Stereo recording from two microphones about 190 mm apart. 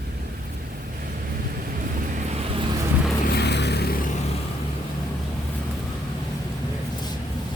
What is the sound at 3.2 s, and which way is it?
Vehicle, 60° left (ahead or behind).